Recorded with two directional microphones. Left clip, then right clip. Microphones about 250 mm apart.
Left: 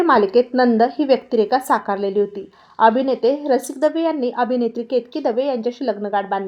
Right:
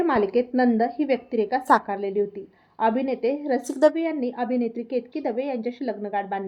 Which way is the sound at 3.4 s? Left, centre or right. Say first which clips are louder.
Left 2 dB; centre.